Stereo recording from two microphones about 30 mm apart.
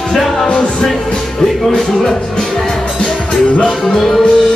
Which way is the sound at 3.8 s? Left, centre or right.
Centre.